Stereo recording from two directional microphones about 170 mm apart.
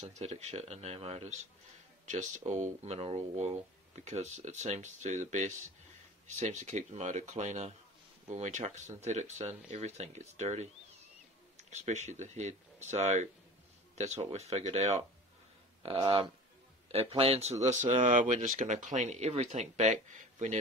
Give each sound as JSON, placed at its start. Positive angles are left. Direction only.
{"t": 0.0, "sound": "speech", "side_deg": -40}